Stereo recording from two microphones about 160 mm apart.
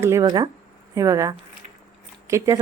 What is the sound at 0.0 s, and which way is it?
Speech, 20° right (ahead or behind).